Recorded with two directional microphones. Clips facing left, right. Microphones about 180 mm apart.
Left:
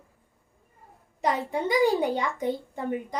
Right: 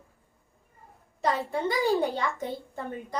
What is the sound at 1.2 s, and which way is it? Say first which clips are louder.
A woman's voice: left 1 dB; 15° left (ahead or behind).